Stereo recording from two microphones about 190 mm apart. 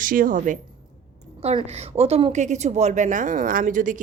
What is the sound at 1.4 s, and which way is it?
A woman's voice, 30° right (ahead or behind).